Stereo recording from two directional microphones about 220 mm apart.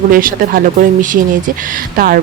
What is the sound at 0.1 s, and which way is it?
Speech, 40° right (ahead or behind).